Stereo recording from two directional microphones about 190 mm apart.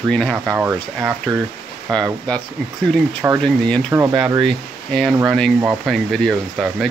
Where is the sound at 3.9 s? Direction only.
15° right (ahead or behind).